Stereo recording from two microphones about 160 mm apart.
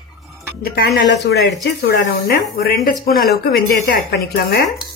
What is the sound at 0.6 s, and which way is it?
A woman's voice, 80° left.